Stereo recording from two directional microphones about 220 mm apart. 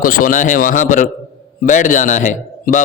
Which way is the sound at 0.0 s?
40° left (ahead or behind).